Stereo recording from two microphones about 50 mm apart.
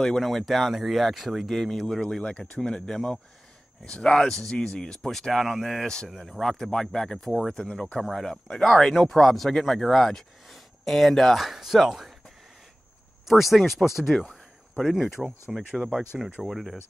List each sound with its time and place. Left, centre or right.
0.2 s speech: centre
2.9 s speech: centre
13.3 s speech: centre
14.1 s speech: centre
14.8 s speech: centre
16.4 s speech: centre